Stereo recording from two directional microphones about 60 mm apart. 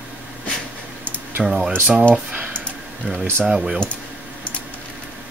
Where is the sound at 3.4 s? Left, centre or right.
Centre.